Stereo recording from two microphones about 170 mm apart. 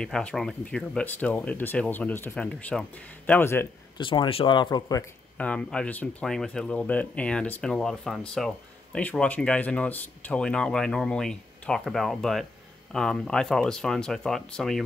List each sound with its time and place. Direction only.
0.0 s speech: 5° left (ahead or behind)
4.0 s speech: 30° left (ahead or behind)
5.4 s speech: 5° left (ahead or behind)